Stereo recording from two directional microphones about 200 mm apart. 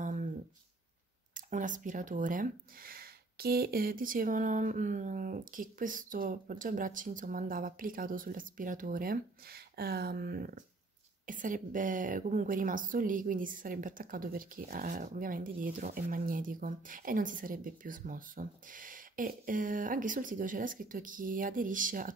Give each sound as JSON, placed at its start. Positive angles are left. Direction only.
{"t": 1.3, "sound": "speech", "side_deg": -40}